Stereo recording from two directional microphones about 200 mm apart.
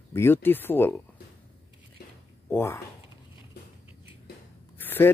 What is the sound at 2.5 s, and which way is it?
Speech, 10° left (ahead or behind).